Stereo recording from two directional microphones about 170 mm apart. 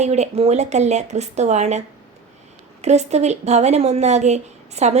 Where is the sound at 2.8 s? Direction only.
40° right (ahead or behind).